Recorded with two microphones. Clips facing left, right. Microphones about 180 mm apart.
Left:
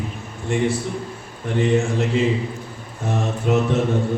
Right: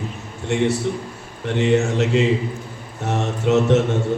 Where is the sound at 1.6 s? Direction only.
75° right (ahead or behind).